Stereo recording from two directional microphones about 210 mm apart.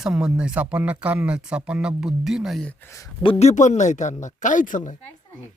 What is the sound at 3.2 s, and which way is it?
Speech, 30° left (ahead or behind).